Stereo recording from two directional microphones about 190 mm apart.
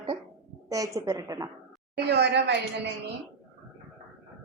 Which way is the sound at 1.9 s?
60° right (ahead or behind).